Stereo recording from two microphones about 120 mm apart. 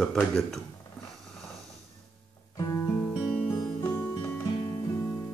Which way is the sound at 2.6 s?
30° left (ahead or behind).